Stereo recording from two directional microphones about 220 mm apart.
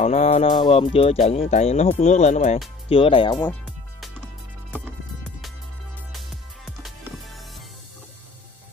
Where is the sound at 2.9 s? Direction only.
25° left (ahead or behind).